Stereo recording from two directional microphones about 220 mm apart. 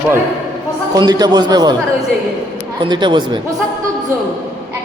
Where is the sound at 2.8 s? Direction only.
20° right (ahead or behind).